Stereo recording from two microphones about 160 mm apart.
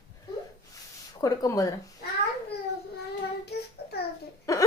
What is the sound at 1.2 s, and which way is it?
Speech, 20° left (ahead or behind).